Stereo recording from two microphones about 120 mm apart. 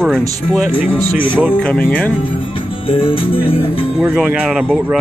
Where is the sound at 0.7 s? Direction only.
45° left (ahead or behind).